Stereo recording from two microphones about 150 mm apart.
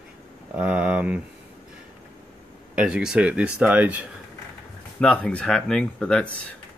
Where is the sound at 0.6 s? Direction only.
5° right (ahead or behind).